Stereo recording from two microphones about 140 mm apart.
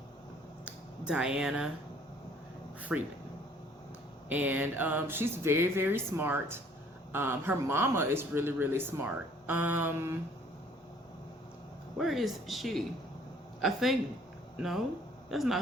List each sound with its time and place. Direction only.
0.6 s a sound: 5° right (ahead or behind)
2.9 s speech: 5° right (ahead or behind)
4.3 s speech: 10° right (ahead or behind)
11.9 s speech: centre (ahead or behind)
15.3 s speech: centre (ahead or behind)